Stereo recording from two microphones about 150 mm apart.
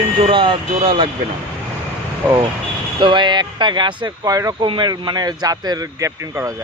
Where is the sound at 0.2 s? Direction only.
35° right (ahead or behind).